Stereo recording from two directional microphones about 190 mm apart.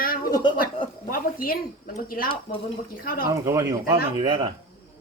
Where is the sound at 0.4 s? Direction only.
25° left (ahead or behind).